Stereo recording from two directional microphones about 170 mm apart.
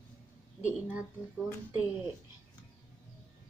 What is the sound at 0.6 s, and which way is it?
Speech, 10° right (ahead or behind).